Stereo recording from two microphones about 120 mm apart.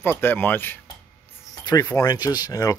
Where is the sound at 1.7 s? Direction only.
30° left (ahead or behind).